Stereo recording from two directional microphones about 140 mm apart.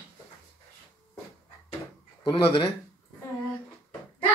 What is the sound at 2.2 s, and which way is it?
Speech, 35° left (ahead or behind).